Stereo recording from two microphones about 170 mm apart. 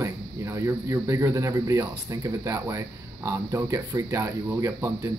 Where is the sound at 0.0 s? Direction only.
15° right (ahead or behind).